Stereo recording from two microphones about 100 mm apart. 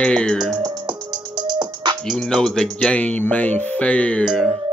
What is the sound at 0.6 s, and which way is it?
Music, 45° right (ahead or behind).